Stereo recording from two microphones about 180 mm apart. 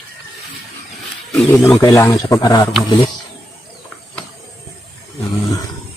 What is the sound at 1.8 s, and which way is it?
Speech, 15° left (ahead or behind).